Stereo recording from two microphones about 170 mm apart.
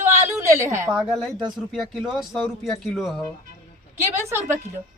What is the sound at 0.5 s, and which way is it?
Speech, 15° right (ahead or behind).